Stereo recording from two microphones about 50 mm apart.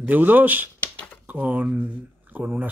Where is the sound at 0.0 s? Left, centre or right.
Right.